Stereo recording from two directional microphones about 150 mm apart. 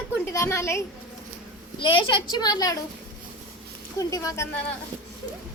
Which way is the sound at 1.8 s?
35° left (ahead or behind).